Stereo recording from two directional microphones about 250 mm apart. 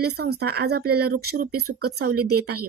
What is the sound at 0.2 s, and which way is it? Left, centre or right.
A woman's voice, right.